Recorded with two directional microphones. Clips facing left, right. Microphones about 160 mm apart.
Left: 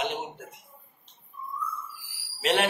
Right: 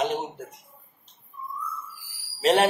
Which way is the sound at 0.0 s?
40° right (ahead or behind).